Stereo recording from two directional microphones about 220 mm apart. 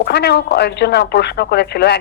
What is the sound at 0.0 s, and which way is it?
Speech, 50° left (ahead or behind).